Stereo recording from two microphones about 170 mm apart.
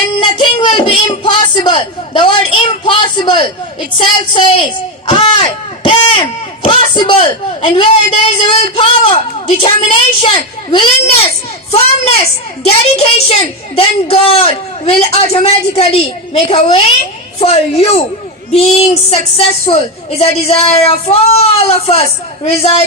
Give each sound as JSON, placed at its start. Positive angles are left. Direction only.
{"t": 0.2, "sound": "a man's voice", "side_deg": 25}
{"t": 19.6, "sound": "a man's voice", "side_deg": 35}